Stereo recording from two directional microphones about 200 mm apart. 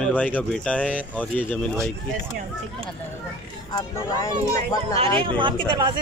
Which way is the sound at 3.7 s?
15° left (ahead or behind).